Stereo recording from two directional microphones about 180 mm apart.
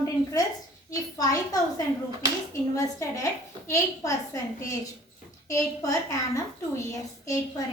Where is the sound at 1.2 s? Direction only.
20° left (ahead or behind).